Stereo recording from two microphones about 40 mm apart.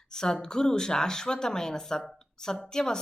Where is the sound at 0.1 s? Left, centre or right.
Centre.